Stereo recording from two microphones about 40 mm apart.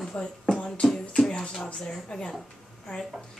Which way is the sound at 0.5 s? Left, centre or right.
Left.